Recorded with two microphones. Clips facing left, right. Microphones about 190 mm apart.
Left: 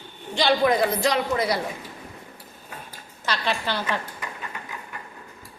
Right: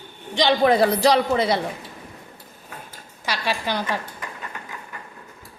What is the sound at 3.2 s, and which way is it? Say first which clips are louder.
Speech: right 1 dB; 10° right (ahead or behind).